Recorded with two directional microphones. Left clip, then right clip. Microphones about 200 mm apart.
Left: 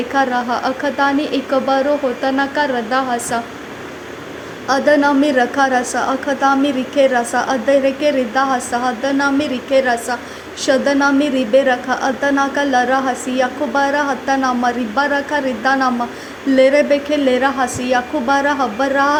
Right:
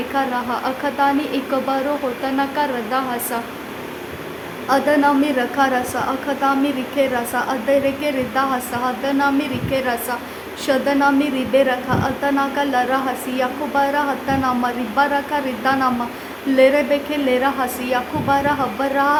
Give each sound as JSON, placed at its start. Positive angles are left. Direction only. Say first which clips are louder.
{"t": 0.1, "sound": "a woman's voice", "louder": "left 5 dB", "side_deg": 15}
{"t": 4.7, "sound": "a woman's voice", "louder": "left 3 dB", "side_deg": 20}